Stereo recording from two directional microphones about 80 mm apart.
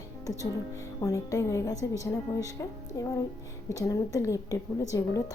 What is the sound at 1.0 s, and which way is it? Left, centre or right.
A woman's voice, left.